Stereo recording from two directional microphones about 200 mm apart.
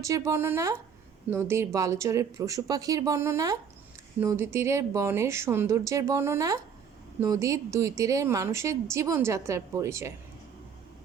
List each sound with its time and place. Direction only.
0.0 s a woman's voice: 15° right (ahead or behind)